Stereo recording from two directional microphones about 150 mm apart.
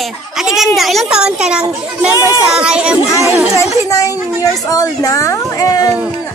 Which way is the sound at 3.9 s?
20° left (ahead or behind).